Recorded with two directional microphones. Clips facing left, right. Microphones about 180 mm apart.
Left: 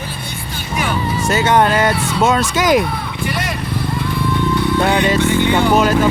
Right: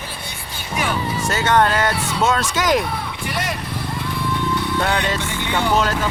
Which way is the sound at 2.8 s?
75° left (ahead or behind).